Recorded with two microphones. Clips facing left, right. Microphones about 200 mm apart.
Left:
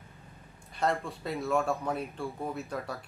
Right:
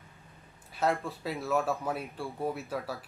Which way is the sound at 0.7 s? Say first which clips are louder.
Right 1 dB; centre (ahead or behind).